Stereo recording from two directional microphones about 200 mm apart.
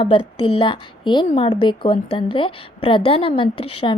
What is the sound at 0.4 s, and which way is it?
A woman's voice, 25° left (ahead or behind).